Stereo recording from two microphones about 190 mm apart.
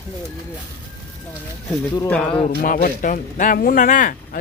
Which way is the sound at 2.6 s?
45° left (ahead or behind).